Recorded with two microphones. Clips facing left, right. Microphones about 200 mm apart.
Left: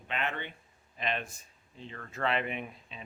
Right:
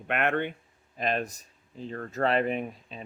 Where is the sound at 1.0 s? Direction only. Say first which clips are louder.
Right 6 dB; 40° right (ahead or behind).